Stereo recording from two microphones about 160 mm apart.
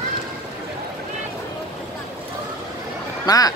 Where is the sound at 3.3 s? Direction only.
25° left (ahead or behind).